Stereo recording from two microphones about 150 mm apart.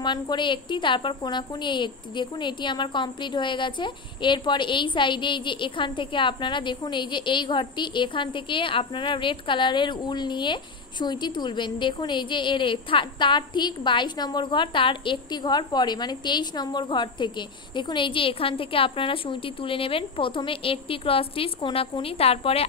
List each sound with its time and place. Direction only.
0.0 s a woman's voice: 30° left (ahead or behind)